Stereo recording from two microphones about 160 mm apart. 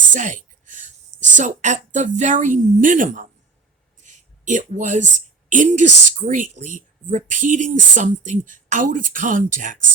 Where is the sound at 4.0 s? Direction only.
50° right (ahead or behind).